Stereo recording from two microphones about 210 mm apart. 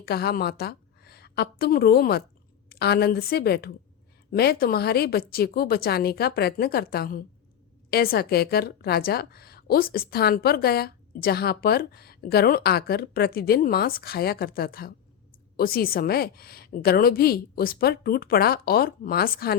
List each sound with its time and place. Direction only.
0.0 s a woman's voice: 50° left (ahead or behind)